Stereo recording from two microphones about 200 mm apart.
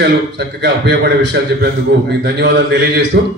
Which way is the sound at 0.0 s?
60° right (ahead or behind).